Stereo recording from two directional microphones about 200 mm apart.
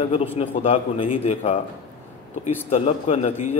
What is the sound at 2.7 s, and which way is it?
Speech, 30° left (ahead or behind).